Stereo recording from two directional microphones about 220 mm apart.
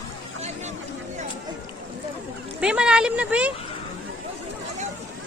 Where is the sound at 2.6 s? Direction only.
5° right (ahead or behind).